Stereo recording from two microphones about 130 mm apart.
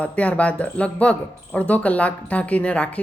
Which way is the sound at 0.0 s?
10° left (ahead or behind).